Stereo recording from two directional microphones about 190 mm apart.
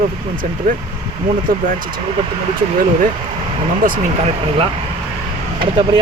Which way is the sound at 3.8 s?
45° right (ahead or behind).